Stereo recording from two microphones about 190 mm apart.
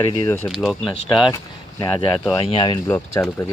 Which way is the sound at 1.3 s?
20° left (ahead or behind).